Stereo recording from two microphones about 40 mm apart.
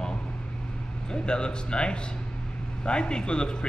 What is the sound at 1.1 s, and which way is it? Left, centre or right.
A man's voice, left.